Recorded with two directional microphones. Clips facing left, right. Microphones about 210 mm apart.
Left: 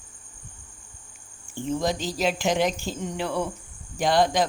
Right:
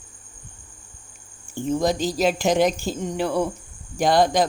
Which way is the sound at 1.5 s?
40° right (ahead or behind).